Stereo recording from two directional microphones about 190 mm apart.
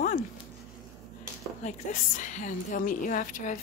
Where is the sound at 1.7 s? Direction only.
40° left (ahead or behind).